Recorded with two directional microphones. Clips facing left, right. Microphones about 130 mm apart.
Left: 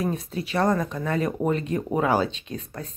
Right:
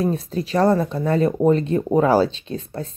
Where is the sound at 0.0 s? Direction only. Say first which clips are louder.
Right 5 dB; 35° right (ahead or behind).